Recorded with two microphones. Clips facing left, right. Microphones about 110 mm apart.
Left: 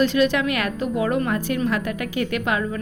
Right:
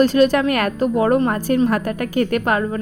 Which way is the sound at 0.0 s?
40° right (ahead or behind).